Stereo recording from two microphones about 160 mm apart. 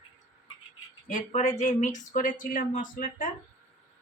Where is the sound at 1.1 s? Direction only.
50° left (ahead or behind).